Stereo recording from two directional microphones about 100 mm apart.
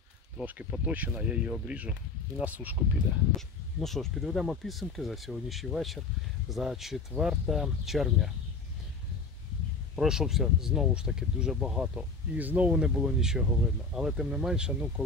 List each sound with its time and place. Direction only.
0.8 s speech: 15° right (ahead or behind)
3.3 s speech: 5° left (ahead or behind)
9.9 s speech: 5° right (ahead or behind)